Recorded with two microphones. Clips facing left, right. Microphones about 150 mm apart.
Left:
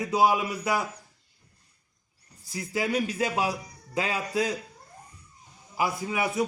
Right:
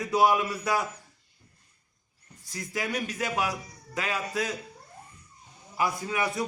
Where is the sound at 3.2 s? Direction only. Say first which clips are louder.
Right 2 dB; 30° left (ahead or behind).